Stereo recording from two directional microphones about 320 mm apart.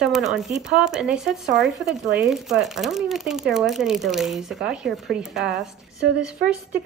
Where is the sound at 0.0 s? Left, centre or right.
Centre.